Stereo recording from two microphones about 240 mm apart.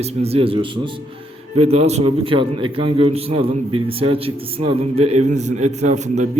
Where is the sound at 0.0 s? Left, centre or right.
Right.